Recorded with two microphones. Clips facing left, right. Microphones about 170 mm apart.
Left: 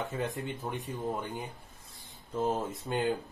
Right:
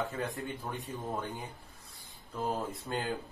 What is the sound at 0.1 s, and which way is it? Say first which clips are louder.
Speech: left 2 dB; 20° left (ahead or behind).